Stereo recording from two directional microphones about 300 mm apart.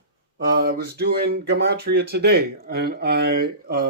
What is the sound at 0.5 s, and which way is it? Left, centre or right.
Speech, right.